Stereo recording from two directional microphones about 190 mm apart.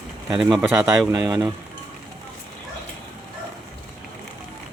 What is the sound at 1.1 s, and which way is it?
Speech, 15° right (ahead or behind).